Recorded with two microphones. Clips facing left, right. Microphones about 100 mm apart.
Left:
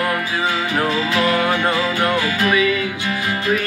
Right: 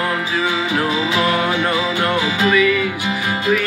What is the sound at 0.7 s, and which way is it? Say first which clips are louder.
Music: right 1 dB; 15° right (ahead or behind).